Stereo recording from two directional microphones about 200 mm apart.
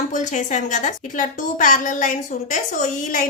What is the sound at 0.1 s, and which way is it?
A woman's voice, 40° left (ahead or behind).